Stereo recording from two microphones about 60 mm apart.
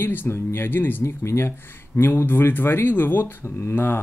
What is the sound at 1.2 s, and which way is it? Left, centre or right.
Speech, left.